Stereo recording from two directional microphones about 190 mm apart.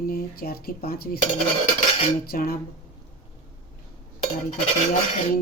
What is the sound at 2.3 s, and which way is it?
Speech, 50° left (ahead or behind).